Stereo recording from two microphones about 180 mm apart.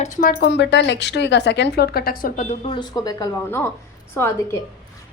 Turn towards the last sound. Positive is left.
turn(degrees=15)  # may be behind; listen again after turning